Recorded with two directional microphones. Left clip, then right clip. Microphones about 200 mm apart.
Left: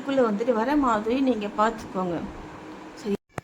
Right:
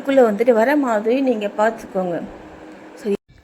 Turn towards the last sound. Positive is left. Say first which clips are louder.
# right 7 dB
turn(degrees=-5)  # may be behind; listen again after turning